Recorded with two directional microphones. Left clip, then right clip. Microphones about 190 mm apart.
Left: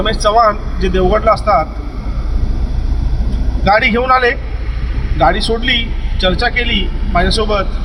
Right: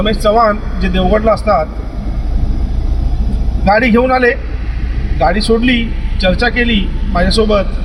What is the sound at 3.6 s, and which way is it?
A man's voice, centre (ahead or behind).